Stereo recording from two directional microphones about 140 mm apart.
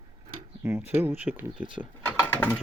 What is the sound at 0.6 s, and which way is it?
Speech, 15° right (ahead or behind).